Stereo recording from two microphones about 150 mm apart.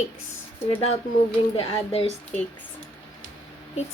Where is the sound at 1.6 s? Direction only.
40° left (ahead or behind).